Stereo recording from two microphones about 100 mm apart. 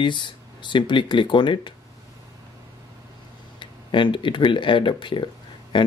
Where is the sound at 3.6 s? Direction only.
55° left (ahead or behind).